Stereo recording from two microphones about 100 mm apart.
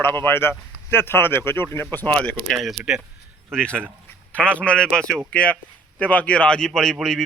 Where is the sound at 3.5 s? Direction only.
10° left (ahead or behind).